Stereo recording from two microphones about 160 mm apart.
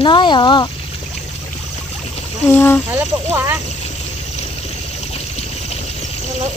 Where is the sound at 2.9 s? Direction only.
15° right (ahead or behind).